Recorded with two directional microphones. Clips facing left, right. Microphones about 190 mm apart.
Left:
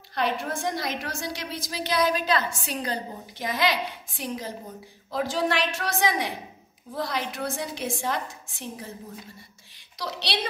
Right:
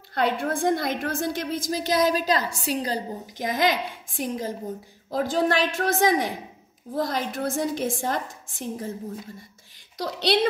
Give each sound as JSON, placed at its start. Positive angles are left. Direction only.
{"t": 0.1, "sound": "a woman's voice", "side_deg": -55}
{"t": 9.9, "sound": "a woman's voice", "side_deg": -50}